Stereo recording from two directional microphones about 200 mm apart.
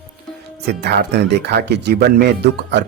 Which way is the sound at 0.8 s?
55° right (ahead or behind).